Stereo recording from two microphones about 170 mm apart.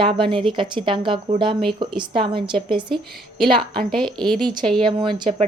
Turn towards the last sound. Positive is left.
turn(degrees=-30)  # may be behind; listen again after turning